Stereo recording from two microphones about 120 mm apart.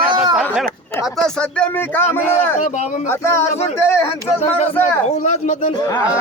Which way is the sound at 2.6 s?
90° left.